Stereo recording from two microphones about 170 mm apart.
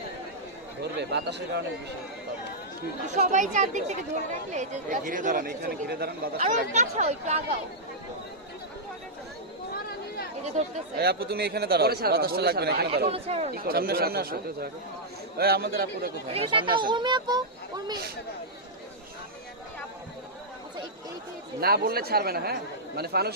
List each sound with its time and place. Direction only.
0.8 s speech: 85° right
3.2 s speech: 45° right (ahead or behind)
10.9 s a man's voice: 70° right (ahead or behind)
13.1 s speech: 35° right (ahead or behind)
13.5 s speech: 60° right (ahead or behind)
16.3 s speech: 30° right (ahead or behind)
21.6 s a man's voice: 65° right (ahead or behind)